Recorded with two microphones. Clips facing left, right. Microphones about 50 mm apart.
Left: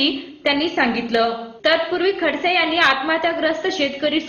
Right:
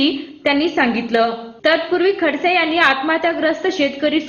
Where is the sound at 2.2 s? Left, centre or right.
Centre.